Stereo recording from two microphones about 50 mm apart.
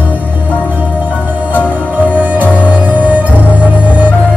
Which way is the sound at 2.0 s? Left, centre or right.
Right.